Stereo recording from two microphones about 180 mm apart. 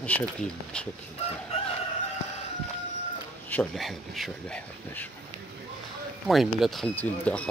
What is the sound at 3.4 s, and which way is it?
Speech, 5° left (ahead or behind).